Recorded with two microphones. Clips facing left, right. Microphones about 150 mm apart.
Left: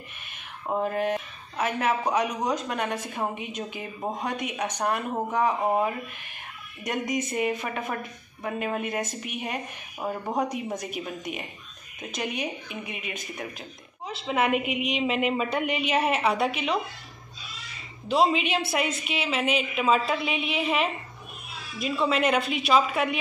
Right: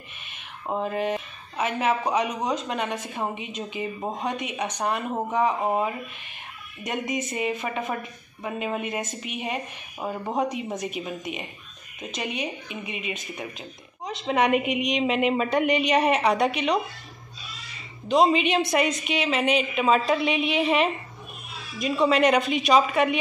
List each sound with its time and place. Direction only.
0.7 s a woman's voice: centre (ahead or behind)
12.9 s speech: 50° left (ahead or behind)
13.4 s a woman's voice: 5° left (ahead or behind)
18.0 s a woman's voice: 5° left (ahead or behind)
22.0 s a woman's voice: centre (ahead or behind)